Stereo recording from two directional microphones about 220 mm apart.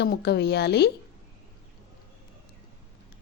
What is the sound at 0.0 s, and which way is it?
Speech, 50° left (ahead or behind).